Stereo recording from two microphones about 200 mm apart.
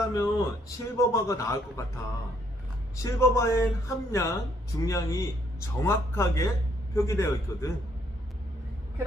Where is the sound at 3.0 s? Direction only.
15° left (ahead or behind).